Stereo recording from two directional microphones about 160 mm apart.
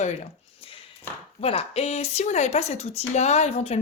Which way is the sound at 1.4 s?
40° left (ahead or behind).